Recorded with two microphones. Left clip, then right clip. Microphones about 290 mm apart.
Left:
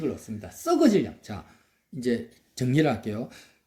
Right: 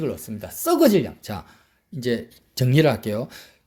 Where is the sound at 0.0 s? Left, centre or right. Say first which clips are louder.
Right 4 dB; right.